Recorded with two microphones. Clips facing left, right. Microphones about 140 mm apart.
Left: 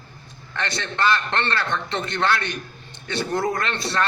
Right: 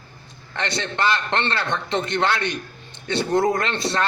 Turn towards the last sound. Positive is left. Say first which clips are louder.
# right 2 dB
turn(degrees=-20)  # may be behind; listen again after turning